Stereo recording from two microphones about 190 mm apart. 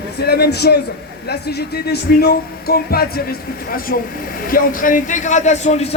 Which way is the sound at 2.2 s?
55° left (ahead or behind).